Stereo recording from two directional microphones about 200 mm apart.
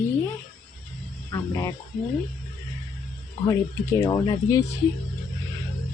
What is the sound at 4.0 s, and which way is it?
Speech, 20° left (ahead or behind).